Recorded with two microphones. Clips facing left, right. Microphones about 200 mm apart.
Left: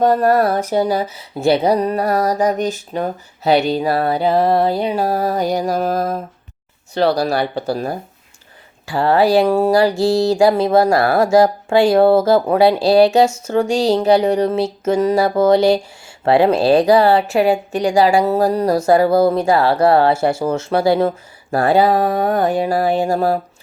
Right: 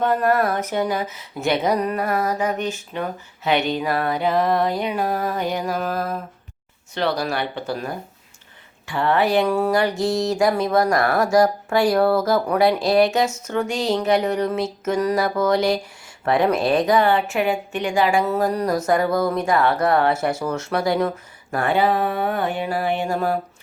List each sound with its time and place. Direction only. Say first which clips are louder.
0.0 s speech: left 5 dB; 35° left (ahead or behind)
8.9 s a sound: left 5 dB; 35° left (ahead or behind)
16.2 s speech: left 6 dB; 30° left (ahead or behind)